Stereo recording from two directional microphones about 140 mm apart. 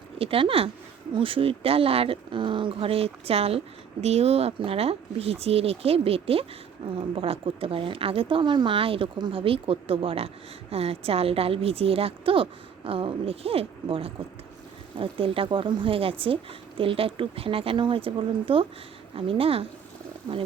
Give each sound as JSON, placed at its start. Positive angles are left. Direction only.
{"t": 0.2, "sound": "speech", "side_deg": -40}